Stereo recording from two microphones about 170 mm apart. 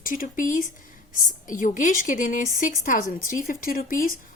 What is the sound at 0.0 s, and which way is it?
Speech, 55° left (ahead or behind).